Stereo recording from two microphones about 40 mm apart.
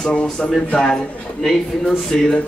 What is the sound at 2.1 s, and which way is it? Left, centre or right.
Speech, centre.